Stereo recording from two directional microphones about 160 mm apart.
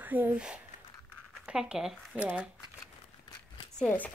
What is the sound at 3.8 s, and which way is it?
Speech, 10° left (ahead or behind).